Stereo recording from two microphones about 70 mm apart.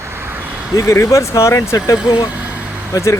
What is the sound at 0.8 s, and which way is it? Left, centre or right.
Speech, left.